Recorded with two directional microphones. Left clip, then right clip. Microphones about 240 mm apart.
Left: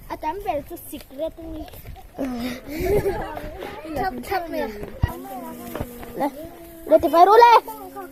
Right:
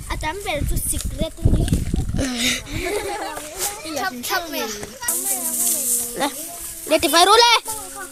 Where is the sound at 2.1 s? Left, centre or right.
Right.